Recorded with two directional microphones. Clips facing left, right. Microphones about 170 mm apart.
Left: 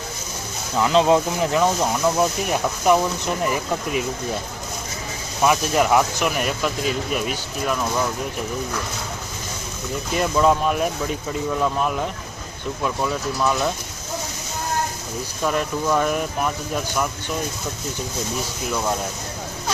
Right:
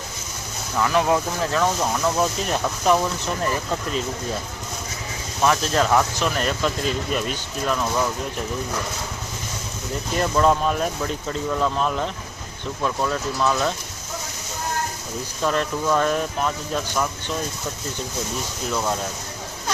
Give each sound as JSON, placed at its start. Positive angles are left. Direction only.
{"t": 0.8, "sound": "speech", "side_deg": 20}
{"t": 5.4, "sound": "speech", "side_deg": 10}
{"t": 10.2, "sound": "speech", "side_deg": 5}
{"t": 15.4, "sound": "speech", "side_deg": 10}